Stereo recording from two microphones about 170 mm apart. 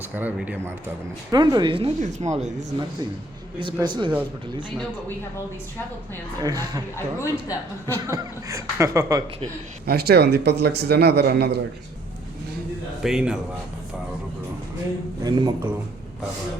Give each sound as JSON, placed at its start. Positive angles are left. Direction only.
{"t": 0.2, "sound": "speech", "side_deg": -10}
{"t": 1.3, "sound": "speech", "side_deg": -25}
{"t": 2.0, "sound": "speech", "side_deg": -45}
{"t": 3.6, "sound": "speech", "side_deg": -25}
{"t": 6.9, "sound": "a woman's voice", "side_deg": 15}
{"t": 8.0, "sound": "speech", "side_deg": -15}
{"t": 9.8, "sound": "speech", "side_deg": -65}
{"t": 13.0, "sound": "a man's voice", "side_deg": -5}
{"t": 15.2, "sound": "speech", "side_deg": -25}